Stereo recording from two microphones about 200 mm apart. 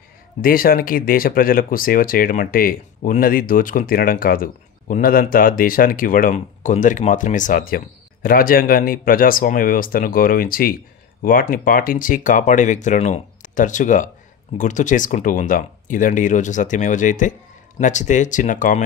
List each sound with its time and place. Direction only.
0.4 s speech: 45° left (ahead or behind)